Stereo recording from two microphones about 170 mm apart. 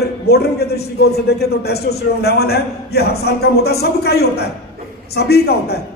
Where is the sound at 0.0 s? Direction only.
70° left (ahead or behind).